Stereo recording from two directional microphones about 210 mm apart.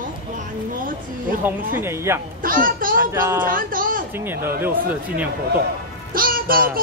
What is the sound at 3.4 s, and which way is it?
Speech, 40° right (ahead or behind).